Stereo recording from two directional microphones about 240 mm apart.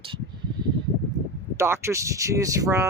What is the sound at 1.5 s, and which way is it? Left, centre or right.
Speech, centre.